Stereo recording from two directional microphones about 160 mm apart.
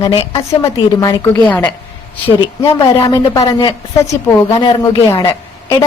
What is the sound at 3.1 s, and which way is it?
Speech, 20° left (ahead or behind).